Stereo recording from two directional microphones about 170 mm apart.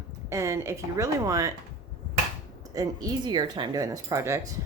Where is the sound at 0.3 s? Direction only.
15° right (ahead or behind).